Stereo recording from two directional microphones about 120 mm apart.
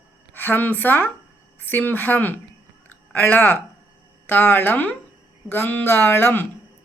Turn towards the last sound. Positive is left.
turn(degrees=20)  # may be behind; listen again after turning